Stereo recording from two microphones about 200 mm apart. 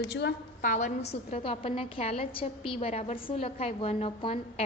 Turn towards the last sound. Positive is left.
turn(degrees=30)  # may be behind; listen again after turning